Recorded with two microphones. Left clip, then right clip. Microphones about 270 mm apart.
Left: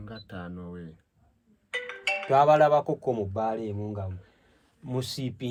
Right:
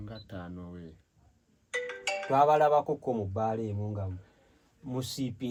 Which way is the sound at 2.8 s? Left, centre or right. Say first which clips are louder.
Left 3 dB; left.